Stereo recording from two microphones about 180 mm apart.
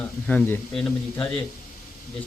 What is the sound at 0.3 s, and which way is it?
A man's voice, 10° left (ahead or behind).